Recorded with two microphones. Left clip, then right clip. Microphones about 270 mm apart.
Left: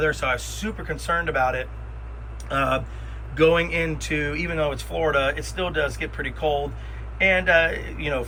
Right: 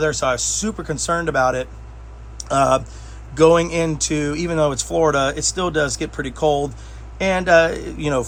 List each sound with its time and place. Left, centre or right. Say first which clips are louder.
0.0 s speech: right 4 dB; centre